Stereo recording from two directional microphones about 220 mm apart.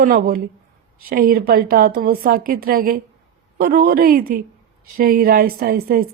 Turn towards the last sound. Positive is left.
turn(degrees=-40)  # may be behind; listen again after turning